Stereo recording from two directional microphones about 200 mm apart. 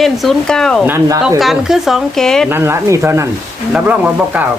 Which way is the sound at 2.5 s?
10° right (ahead or behind).